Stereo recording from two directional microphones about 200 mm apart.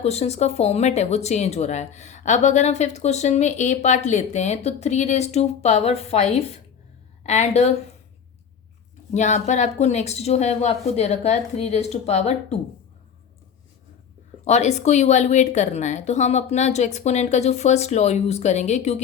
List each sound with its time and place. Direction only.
0.0 s speech: 30° left (ahead or behind)
9.1 s speech: 35° left (ahead or behind)
14.4 s speech: 35° left (ahead or behind)